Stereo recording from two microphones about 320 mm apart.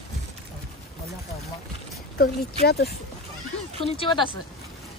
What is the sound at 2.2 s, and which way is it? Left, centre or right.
Speech, left.